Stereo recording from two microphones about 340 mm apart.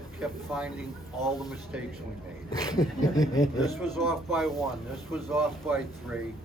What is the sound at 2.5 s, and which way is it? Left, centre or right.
Speech, centre.